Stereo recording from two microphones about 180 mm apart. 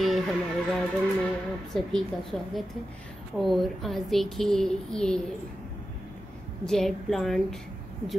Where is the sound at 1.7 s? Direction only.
Centre (ahead or behind).